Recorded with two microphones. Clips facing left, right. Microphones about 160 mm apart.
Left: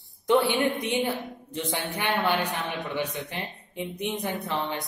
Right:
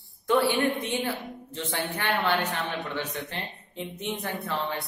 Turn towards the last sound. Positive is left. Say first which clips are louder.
# left 1 dB
turn(degrees=20)  # may be behind; listen again after turning